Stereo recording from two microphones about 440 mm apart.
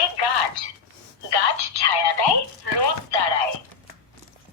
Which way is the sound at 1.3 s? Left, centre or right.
Left.